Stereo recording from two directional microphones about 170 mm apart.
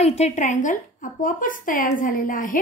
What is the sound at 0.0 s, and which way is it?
Speech, 40° left (ahead or behind).